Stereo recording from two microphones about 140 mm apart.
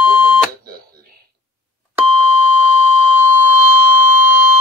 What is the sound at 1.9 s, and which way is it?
Beep, 15° right (ahead or behind).